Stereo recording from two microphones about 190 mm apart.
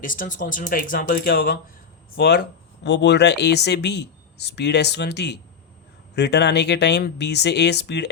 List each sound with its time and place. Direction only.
0.0 s speech: 45° left (ahead or behind); by 8.1 s 65° left (ahead or behind)